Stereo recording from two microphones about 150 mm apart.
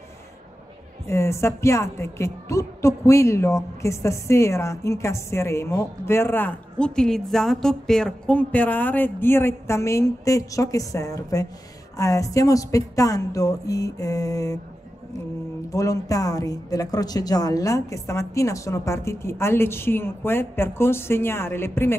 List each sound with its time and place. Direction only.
1.0 s a woman's voice: 20° left (ahead or behind)
15.7 s a woman's voice: 20° left (ahead or behind)